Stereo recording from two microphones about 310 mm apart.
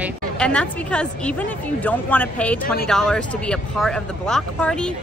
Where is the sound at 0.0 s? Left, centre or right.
Centre.